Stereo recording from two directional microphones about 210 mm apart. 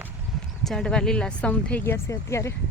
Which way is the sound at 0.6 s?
Centre (ahead or behind).